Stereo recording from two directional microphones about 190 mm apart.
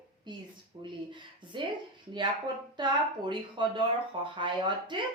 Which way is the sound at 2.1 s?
25° right (ahead or behind).